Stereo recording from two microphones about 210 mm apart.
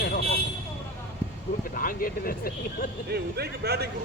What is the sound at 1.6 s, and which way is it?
Vehicle, 40° left (ahead or behind).